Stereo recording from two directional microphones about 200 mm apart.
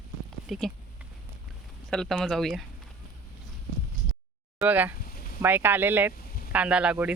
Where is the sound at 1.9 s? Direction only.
5° left (ahead or behind).